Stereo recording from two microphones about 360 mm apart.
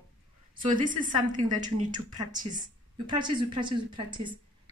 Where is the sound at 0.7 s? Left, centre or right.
Centre.